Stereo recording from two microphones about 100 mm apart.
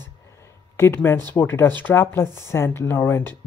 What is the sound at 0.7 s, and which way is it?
Speech, 25° left (ahead or behind).